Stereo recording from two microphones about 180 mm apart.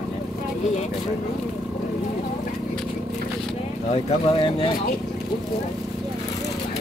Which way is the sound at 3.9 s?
30° left (ahead or behind).